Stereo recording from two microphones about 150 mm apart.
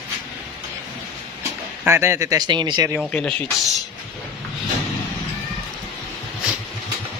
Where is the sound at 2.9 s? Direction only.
5° left (ahead or behind).